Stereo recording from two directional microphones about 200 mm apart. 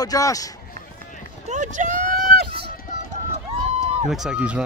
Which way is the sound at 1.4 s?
40° right (ahead or behind).